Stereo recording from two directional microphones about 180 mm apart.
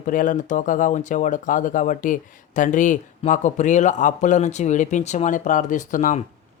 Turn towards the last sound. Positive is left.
turn(degrees=45)  # may be behind; listen again after turning